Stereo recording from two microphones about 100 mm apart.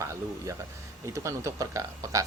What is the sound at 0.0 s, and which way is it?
Speech, 30° right (ahead or behind).